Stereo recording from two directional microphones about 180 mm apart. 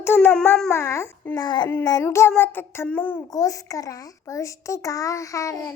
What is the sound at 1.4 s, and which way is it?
A child's voice, 25° left (ahead or behind).